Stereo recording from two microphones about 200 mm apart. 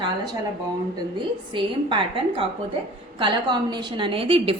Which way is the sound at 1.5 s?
25° right (ahead or behind).